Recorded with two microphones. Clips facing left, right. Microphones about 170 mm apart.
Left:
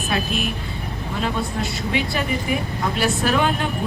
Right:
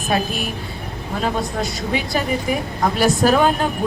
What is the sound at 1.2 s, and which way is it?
Speech, 40° right (ahead or behind).